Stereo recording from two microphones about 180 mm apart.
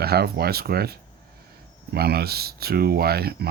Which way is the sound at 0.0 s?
60° right (ahead or behind).